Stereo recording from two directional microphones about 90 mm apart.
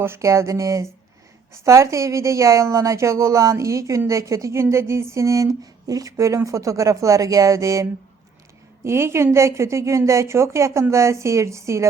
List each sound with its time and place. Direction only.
0.0 s a woman's voice: 30° right (ahead or behind)